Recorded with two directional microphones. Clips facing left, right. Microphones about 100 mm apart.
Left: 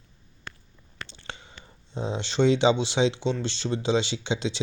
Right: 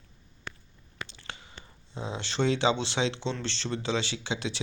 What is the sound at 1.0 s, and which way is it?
Biting, 30° left (ahead or behind).